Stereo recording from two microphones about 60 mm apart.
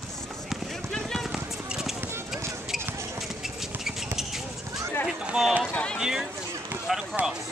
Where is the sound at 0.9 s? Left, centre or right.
Centre.